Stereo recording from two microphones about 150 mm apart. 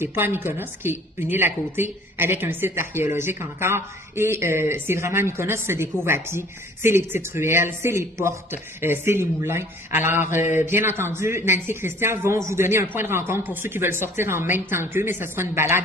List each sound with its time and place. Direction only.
0.0 s a woman's voice: 15° right (ahead or behind)